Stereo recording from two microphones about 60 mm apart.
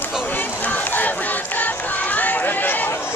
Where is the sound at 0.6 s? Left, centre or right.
Left.